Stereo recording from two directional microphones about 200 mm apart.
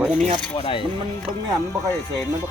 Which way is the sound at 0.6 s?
25° left (ahead or behind).